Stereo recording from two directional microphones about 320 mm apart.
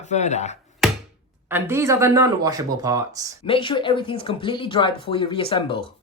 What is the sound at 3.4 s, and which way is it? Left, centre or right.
Speech, centre.